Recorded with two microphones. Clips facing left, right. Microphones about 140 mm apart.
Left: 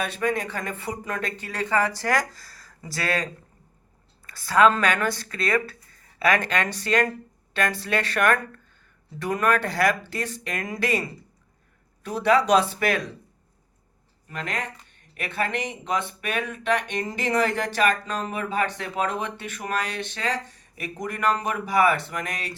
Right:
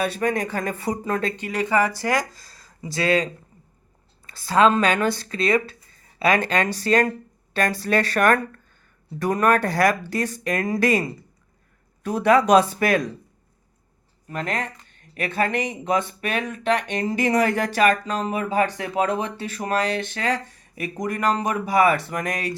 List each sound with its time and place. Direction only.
0.0 s speech: 40° right (ahead or behind)
1.4 s speech: 15° right (ahead or behind)
4.3 s speech: 25° right (ahead or behind); by 11.0 s 45° right (ahead or behind)
12.0 s speech: 50° right (ahead or behind)
14.3 s speech: 40° right (ahead or behind)
20.0 s speech: 45° right (ahead or behind)